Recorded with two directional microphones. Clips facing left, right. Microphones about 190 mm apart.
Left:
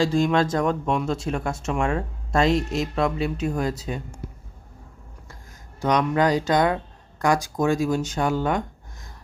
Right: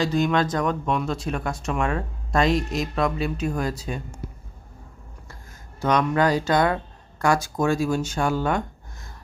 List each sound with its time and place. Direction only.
0.0 s speech: 30° left (ahead or behind)
5.8 s speech: 15° left (ahead or behind)